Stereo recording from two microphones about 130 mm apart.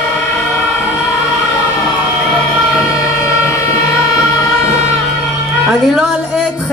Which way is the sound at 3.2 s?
20° left (ahead or behind).